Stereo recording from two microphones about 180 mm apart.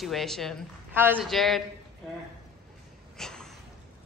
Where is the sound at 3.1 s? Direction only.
5° left (ahead or behind).